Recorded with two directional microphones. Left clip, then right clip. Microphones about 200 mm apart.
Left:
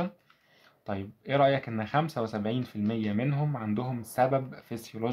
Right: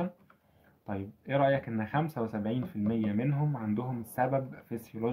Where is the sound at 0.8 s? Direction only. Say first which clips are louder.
Left 3 dB; 40° left (ahead or behind).